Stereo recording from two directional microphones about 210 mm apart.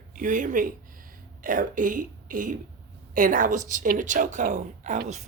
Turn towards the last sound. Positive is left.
turn(degrees=-35)  # may be behind; listen again after turning